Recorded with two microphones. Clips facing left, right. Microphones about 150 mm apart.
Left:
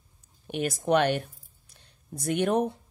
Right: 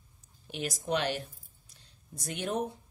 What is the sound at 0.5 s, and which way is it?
A woman's voice, 55° left (ahead or behind).